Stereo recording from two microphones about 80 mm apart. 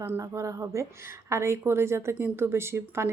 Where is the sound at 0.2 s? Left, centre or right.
Right.